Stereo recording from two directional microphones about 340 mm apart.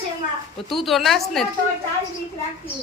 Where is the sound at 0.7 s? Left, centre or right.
Centre.